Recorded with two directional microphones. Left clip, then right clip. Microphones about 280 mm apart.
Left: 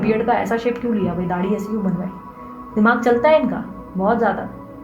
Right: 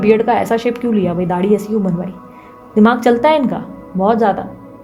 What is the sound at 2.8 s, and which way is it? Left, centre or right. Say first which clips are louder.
A woman's voice: right 3 dB; right.